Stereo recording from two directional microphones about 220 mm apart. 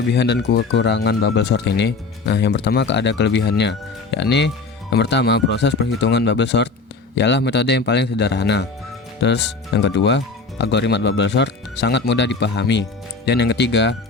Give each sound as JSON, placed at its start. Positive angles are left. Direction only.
{"t": 0.1, "sound": "speech", "side_deg": 50}